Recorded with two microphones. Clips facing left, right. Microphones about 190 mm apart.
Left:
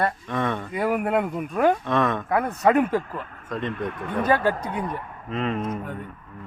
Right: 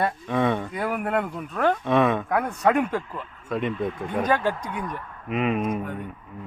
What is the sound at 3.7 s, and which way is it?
Speech, 65° left (ahead or behind).